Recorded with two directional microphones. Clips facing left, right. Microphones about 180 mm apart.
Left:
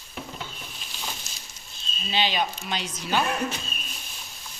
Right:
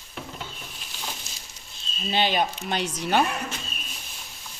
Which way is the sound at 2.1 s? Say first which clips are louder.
Right 2 dB; 50° right (ahead or behind).